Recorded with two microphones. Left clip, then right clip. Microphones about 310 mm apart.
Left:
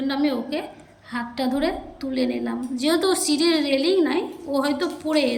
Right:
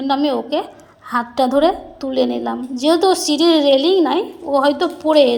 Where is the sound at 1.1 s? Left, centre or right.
Centre.